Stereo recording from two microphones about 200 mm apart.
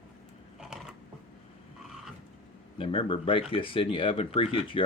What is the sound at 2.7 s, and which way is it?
Speech, 25° left (ahead or behind).